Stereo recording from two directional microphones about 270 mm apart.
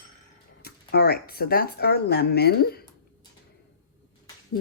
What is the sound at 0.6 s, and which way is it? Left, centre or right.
Speech, left.